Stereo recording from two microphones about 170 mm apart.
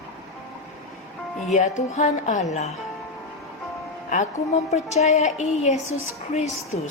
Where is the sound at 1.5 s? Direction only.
45° left (ahead or behind).